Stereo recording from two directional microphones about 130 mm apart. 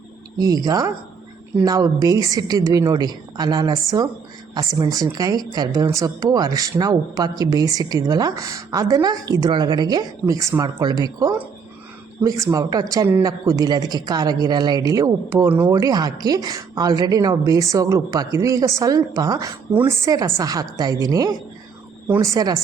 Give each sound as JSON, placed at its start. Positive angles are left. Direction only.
{"t": 0.3, "sound": "speech", "side_deg": -30}